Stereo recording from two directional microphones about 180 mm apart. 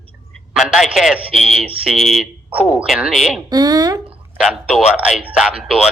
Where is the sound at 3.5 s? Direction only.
20° right (ahead or behind).